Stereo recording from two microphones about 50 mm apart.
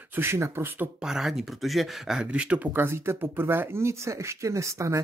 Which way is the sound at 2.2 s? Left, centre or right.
Right.